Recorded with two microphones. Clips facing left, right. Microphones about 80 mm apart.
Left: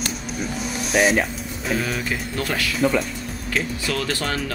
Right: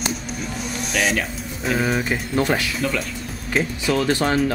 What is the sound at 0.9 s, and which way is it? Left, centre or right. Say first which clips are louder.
Speech: left 4 dB; centre.